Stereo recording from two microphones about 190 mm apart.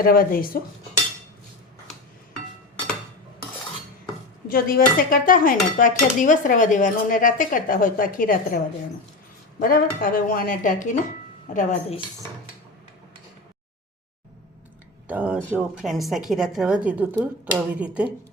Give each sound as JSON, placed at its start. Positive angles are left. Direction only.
{"t": 0.0, "sound": "dishes", "side_deg": 50}
{"t": 4.4, "sound": "dishes", "side_deg": 50}
{"t": 11.5, "sound": "speech", "side_deg": 40}
{"t": 15.0, "sound": "a woman's voice", "side_deg": -5}